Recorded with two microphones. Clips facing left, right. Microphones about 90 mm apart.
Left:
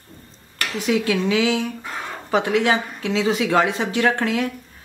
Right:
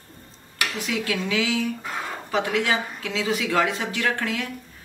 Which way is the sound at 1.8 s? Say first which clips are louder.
Even; centre (ahead or behind).